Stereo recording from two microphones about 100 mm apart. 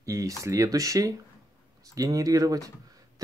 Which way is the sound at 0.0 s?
30° right (ahead or behind).